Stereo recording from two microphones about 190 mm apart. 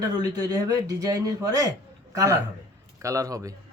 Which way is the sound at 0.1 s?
20° right (ahead or behind).